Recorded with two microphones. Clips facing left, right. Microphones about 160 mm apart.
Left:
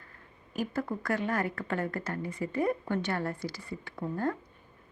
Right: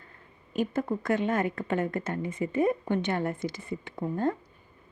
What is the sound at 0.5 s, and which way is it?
Speech, 20° right (ahead or behind).